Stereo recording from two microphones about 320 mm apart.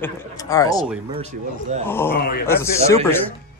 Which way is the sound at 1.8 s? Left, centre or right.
Centre.